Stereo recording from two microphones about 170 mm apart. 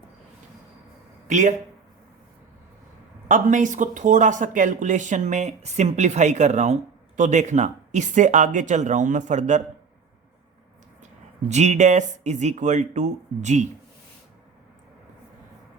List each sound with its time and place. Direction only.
1.3 s speech: 45° right (ahead or behind)
3.2 s speech: 50° right (ahead or behind)
11.0 s speech: 40° right (ahead or behind)